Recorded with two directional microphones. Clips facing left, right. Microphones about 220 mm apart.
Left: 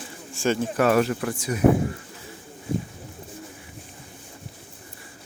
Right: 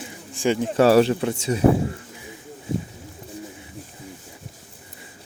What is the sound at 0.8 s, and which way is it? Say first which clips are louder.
Speech: right 6 dB; 30° right (ahead or behind).